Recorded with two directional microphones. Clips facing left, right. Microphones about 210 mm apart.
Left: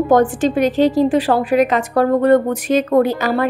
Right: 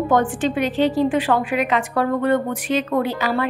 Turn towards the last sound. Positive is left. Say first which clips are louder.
# left 5 dB
turn(degrees=45)  # may be behind; listen again after turning